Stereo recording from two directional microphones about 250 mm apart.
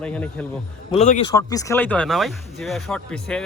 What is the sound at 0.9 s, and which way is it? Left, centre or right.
Speech, left.